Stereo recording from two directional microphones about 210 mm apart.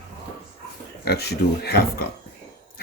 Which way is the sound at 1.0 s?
50° left (ahead or behind).